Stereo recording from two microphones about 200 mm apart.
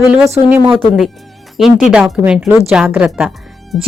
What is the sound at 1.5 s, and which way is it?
A woman's voice, centre (ahead or behind).